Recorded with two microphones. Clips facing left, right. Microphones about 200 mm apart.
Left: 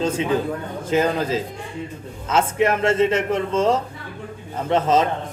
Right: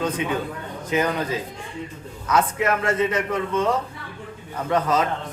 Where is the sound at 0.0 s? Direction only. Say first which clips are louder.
Left 4 dB; 30° left (ahead or behind).